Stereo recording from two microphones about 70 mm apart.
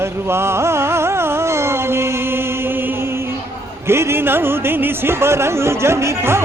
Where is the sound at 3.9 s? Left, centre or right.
Right.